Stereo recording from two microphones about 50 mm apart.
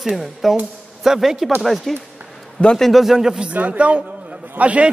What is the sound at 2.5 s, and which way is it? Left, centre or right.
Speech, centre.